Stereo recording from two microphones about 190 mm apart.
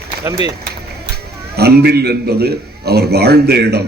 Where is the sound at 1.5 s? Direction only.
55° right (ahead or behind).